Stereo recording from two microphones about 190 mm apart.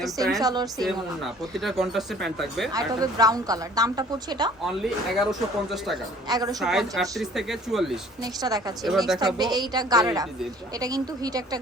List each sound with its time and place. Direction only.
0.4 s a woman's voice: 20° right (ahead or behind)
0.9 s speech: centre (ahead or behind)
2.7 s a woman's voice: 20° right (ahead or behind)
4.6 s speech: centre (ahead or behind)
6.2 s a woman's voice: 20° right (ahead or behind)
6.6 s speech: centre (ahead or behind)
8.2 s a woman's voice: 20° right (ahead or behind)
8.8 s speech: centre (ahead or behind)
9.1 s a woman's voice: 20° right (ahead or behind)